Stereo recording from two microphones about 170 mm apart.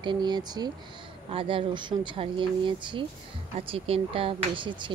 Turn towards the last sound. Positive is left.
turn(degrees=-30)  # may be behind; listen again after turning